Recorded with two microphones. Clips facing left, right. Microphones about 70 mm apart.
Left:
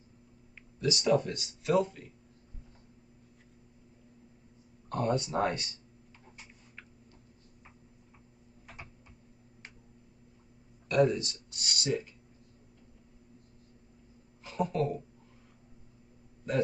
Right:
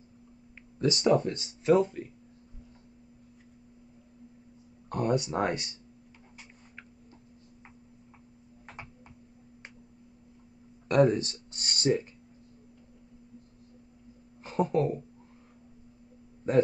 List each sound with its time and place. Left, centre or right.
0.7 s speech: right
4.8 s speech: centre
10.9 s speech: right
14.4 s speech: right
16.5 s a man's voice: right